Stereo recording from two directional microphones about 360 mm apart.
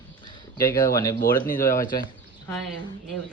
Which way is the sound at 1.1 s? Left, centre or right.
Left.